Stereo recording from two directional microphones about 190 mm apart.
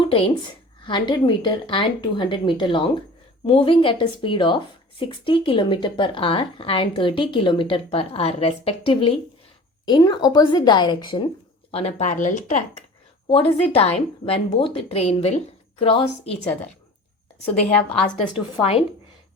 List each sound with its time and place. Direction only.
0.0 s a sound: 25° left (ahead or behind)
0.9 s speech: 25° left (ahead or behind)
18.6 s speech: 30° left (ahead or behind)